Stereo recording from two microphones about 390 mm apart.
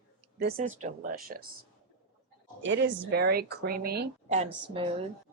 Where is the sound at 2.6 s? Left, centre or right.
Right.